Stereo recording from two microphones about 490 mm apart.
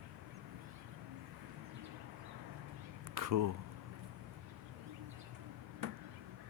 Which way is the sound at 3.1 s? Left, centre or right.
Right.